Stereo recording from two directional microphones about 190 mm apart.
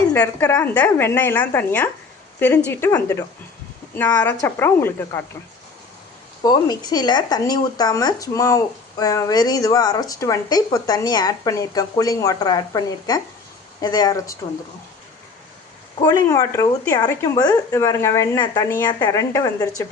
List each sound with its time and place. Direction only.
0.1 s a woman's voice: 10° left (ahead or behind)
6.4 s speech: 20° left (ahead or behind)
16.0 s a woman's voice: 15° left (ahead or behind)